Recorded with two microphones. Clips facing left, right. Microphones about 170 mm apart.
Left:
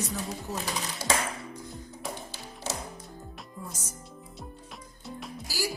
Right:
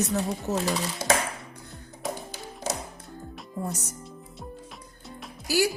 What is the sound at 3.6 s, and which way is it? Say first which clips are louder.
Speech: right 10 dB; 70° right (ahead or behind).